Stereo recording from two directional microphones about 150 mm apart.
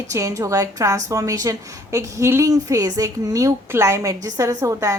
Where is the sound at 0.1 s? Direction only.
20° right (ahead or behind).